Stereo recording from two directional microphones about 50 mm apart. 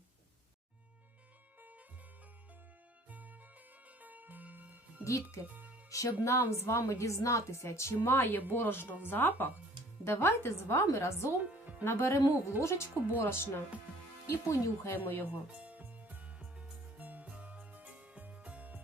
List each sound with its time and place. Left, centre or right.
3.1 s music: right
5.0 s speech: left
6.5 s a woman's voice: left
10.0 s a woman's voice: left
11.8 s a woman's voice: left
13.1 s speech: left
14.3 s a woman's voice: left
15.5 s music: right